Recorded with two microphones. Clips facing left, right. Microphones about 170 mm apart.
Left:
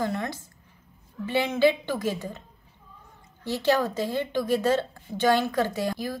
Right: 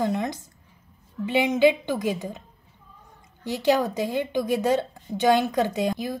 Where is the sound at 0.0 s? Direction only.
20° right (ahead or behind).